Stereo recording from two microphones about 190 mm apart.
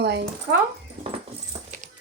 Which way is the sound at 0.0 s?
60° right (ahead or behind).